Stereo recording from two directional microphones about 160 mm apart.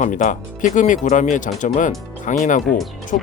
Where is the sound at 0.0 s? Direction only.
50° left (ahead or behind).